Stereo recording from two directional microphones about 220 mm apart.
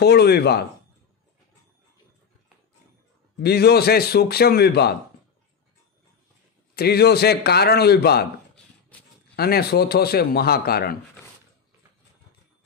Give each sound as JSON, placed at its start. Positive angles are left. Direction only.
{"t": 0.0, "sound": "a man's voice", "side_deg": 45}
{"t": 3.4, "sound": "a man's voice", "side_deg": 45}
{"t": 6.7, "sound": "a man's voice", "side_deg": 45}
{"t": 9.3, "sound": "a man's voice", "side_deg": 45}